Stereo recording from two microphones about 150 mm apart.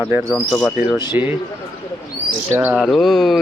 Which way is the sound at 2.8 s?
Centre (ahead or behind).